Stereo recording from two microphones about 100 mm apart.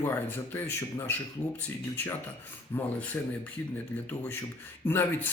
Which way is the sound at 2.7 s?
20° left (ahead or behind).